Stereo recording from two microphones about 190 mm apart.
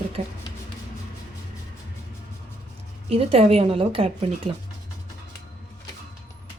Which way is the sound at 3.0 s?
30° right (ahead or behind).